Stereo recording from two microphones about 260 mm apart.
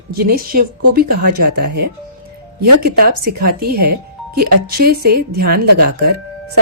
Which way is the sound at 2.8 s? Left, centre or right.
Right.